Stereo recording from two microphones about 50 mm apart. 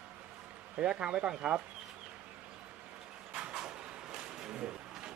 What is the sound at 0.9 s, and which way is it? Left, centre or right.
Speech, right.